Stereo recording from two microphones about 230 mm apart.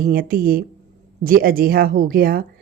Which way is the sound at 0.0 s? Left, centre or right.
Right.